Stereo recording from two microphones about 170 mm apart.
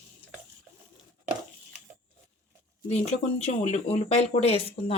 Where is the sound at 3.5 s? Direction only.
40° left (ahead or behind).